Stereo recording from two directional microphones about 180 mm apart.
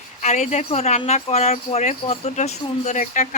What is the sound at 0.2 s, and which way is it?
Speech, 40° left (ahead or behind).